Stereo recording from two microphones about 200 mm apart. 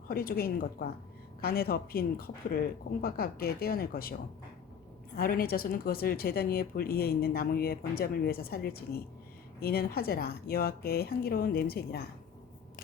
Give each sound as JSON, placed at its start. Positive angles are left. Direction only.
{"t": 0.1, "sound": "speech", "side_deg": 45}
{"t": 5.1, "sound": "speech", "side_deg": 50}